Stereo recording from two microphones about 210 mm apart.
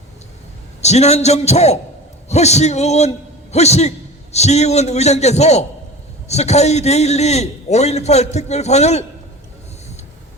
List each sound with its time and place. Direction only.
0.8 s a man's voice: 30° left (ahead or behind)